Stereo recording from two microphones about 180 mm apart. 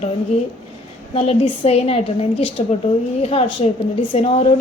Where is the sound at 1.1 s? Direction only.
35° left (ahead or behind).